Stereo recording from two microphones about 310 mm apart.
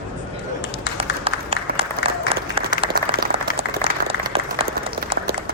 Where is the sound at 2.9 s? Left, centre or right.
Right.